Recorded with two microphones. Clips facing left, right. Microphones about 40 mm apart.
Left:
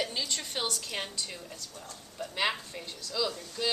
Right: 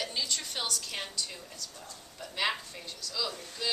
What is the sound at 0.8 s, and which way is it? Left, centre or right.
Speech, centre.